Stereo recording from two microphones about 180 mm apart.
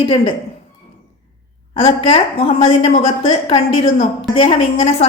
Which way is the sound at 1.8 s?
30° left (ahead or behind).